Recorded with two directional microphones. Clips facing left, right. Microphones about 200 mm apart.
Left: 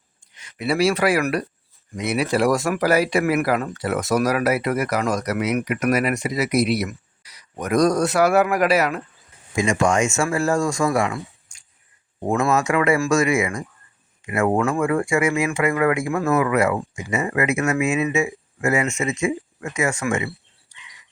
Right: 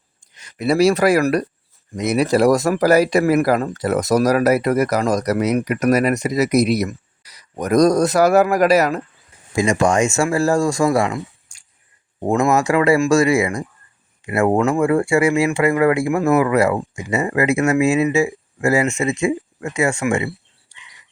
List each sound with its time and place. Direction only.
0.3 s speech: 40° right (ahead or behind)
12.5 s speech: 35° right (ahead or behind)
16.4 s speech: 35° right (ahead or behind)